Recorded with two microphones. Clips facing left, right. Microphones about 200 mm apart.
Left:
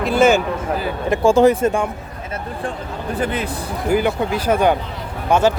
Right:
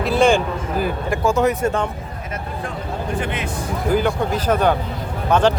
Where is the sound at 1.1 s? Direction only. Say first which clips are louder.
Left 6 dB; 30° left (ahead or behind).